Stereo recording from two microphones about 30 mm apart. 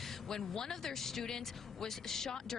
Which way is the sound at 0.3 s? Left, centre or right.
Centre.